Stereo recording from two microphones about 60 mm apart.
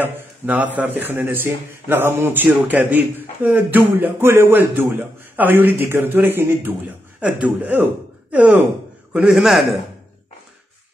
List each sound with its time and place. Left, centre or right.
0.0 s a man's voice: right
7.2 s speech: centre
9.3 s a man's voice: centre